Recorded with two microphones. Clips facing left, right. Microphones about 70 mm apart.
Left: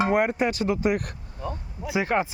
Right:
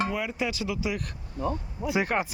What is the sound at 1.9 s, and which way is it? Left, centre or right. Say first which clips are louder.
Speech: left 3 dB; left.